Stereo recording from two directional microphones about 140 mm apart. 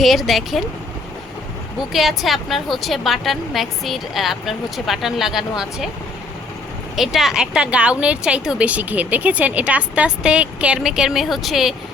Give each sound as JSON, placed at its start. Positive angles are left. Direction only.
{"t": 0.0, "sound": "a woman's voice", "side_deg": 0}
{"t": 1.8, "sound": "a woman's voice", "side_deg": 0}
{"t": 6.9, "sound": "a woman's voice", "side_deg": 0}